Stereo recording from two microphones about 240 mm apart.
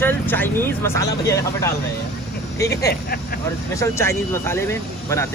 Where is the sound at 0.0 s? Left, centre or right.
Centre.